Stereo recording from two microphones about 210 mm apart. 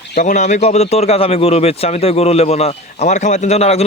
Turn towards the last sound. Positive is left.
turn(degrees=30)  # may be behind; listen again after turning